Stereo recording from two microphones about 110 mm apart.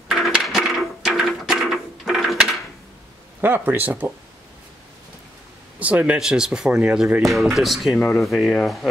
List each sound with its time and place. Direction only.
0.1 s coin: 5° right (ahead or behind)
3.3 s speech: 20° right (ahead or behind)
5.8 s speech: 15° right (ahead or behind)